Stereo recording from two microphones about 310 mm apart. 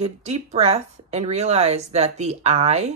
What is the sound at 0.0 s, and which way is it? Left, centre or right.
Speech, right.